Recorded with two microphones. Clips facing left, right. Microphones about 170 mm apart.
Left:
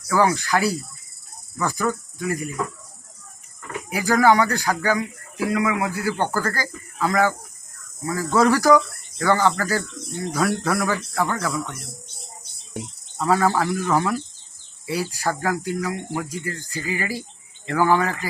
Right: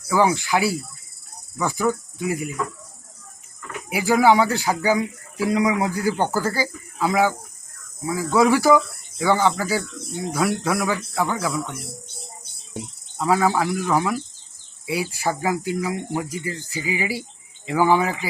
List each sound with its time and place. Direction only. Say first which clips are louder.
0.1 s speech: even; 5° right (ahead or behind)
3.8 s speech: right 1 dB; 10° right (ahead or behind)
5.5 s speech: right 2 dB; 25° right (ahead or behind)